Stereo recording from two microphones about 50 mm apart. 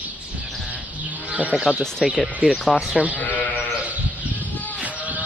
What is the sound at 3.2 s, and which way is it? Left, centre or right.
Sheep, left.